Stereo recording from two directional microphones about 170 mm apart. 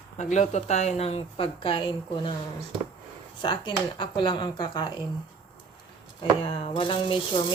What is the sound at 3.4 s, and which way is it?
Speech, 30° left (ahead or behind).